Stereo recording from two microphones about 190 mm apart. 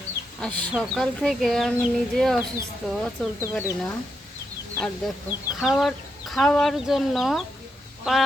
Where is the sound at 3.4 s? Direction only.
15° left (ahead or behind).